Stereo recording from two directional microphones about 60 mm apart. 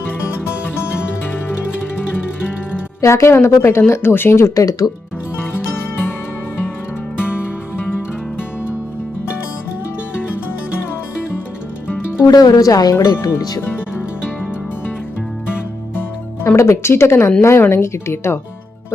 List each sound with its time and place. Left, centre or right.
3.0 s speech: left
4.5 s speech: left
5.4 s music: left
7.2 s music: left
12.3 s speech: left
13.6 s speech: left
16.0 s music: left
16.6 s speech: left